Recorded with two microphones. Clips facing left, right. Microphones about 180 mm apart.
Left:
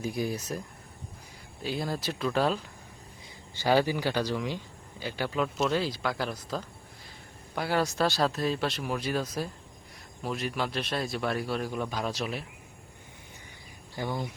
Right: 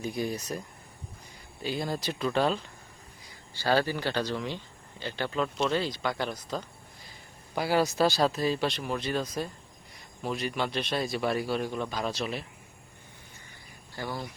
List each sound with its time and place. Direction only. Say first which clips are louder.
0.0 s a man's voice: even; 5° left (ahead or behind)
1.6 s a man's voice: even; centre (ahead or behind)
3.5 s a man's voice: left 2 dB; 15° left (ahead or behind)
13.9 s speech: left 3 dB; 15° left (ahead or behind)